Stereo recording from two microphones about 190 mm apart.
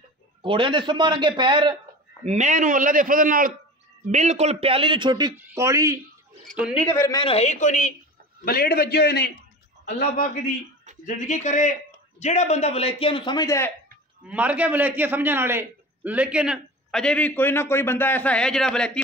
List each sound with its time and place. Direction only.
0.4 s a man's voice: 25° right (ahead or behind)
2.2 s a man's voice: 40° right (ahead or behind); by 5.9 s 15° right (ahead or behind)
6.4 s a man's voice: 5° right (ahead or behind)
6.8 s a man's voice: 15° left (ahead or behind); by 7.9 s 40° left (ahead or behind)
8.5 s a man's voice: 50° left (ahead or behind)
11.1 s a man's voice: 40° left (ahead or behind); by 13.7 s 20° left (ahead or behind)
14.2 s a man's voice: 5° right (ahead or behind)